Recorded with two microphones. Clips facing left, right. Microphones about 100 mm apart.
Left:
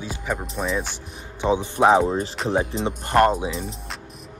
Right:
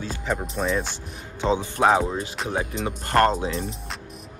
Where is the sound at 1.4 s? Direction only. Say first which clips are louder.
Left 2 dB; 15° left (ahead or behind).